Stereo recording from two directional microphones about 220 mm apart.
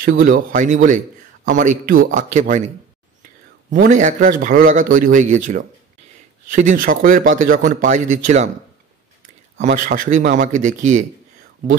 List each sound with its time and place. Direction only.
0.2 s speech: 40° right (ahead or behind)
3.7 s speech: 35° right (ahead or behind)
9.8 s speech: 35° right (ahead or behind)